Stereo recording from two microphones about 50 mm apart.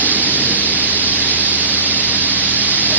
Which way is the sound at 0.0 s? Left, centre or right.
Right.